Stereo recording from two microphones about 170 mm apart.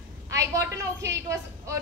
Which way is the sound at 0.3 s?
20° right (ahead or behind).